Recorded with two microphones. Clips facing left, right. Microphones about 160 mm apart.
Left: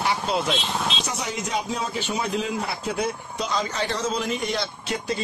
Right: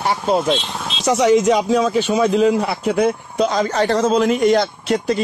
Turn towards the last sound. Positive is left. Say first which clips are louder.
# right 9 dB
turn(degrees=-50)  # may be behind; listen again after turning